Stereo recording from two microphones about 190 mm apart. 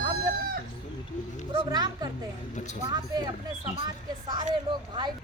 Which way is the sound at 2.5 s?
40° left (ahead or behind).